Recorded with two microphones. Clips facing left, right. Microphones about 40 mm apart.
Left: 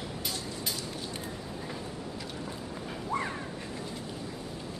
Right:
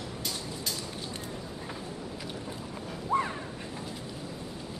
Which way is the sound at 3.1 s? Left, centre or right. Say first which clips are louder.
Right 5 dB; right.